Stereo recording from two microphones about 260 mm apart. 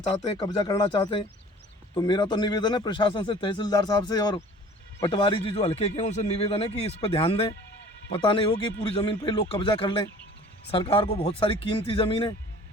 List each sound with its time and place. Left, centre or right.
0.2 s a man's voice: centre